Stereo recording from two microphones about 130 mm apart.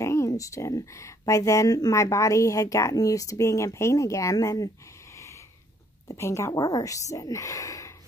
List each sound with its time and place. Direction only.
0.0 s speech: 25° left (ahead or behind)
6.0 s speech: 20° left (ahead or behind)